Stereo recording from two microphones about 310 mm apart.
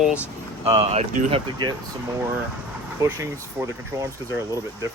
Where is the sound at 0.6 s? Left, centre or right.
Centre.